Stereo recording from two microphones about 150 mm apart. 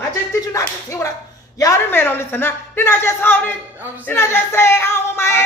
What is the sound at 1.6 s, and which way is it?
Music, 20° left (ahead or behind).